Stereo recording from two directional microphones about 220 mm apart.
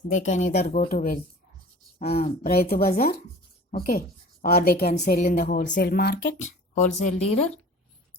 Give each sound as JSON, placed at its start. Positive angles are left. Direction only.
{"t": 0.1, "sound": "a woman's voice", "side_deg": 30}
{"t": 2.2, "sound": "speech", "side_deg": 45}
{"t": 4.9, "sound": "a woman's voice", "side_deg": 35}
{"t": 6.4, "sound": "a woman's voice", "side_deg": 35}